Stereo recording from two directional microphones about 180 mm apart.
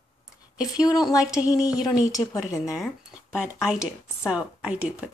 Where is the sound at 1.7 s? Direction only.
5° right (ahead or behind).